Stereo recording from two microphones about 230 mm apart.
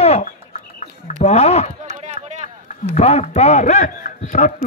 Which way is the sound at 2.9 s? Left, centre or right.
Left.